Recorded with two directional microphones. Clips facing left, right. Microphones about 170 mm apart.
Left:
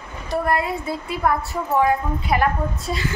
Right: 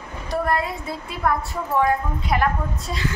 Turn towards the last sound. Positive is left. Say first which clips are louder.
# left 2 dB
turn(degrees=5)  # may be behind; listen again after turning